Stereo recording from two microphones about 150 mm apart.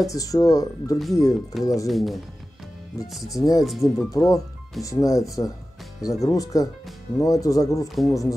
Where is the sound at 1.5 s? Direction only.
Centre (ahead or behind).